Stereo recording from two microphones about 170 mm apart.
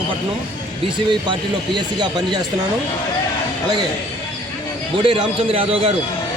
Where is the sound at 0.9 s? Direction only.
30° right (ahead or behind).